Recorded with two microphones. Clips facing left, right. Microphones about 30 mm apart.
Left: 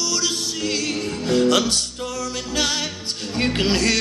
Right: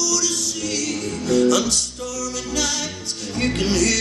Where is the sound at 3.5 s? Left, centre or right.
Left.